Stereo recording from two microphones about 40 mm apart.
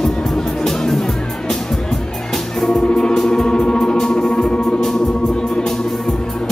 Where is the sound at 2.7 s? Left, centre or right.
Left.